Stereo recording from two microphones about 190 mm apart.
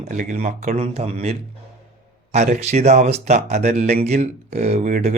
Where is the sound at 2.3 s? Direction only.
35° right (ahead or behind).